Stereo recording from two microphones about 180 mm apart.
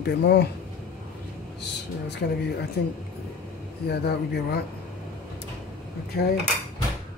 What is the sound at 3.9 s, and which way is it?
Speech, 65° left (ahead or behind).